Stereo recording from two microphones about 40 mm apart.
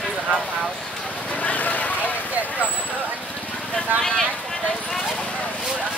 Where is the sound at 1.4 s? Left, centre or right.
Left.